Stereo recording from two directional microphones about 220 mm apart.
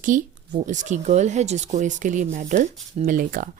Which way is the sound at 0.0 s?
35° right (ahead or behind).